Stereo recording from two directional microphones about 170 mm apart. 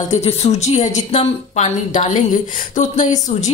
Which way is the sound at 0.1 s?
40° left (ahead or behind).